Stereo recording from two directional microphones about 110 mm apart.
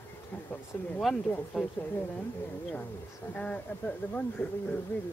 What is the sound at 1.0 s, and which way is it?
Speech, 5° left (ahead or behind).